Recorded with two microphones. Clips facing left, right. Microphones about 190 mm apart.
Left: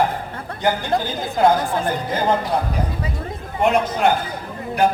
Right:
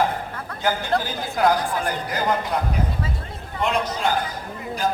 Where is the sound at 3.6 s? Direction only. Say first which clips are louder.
Left 6 dB; 55° left (ahead or behind).